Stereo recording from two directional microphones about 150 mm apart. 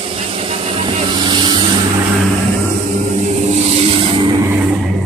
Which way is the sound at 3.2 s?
50° right (ahead or behind).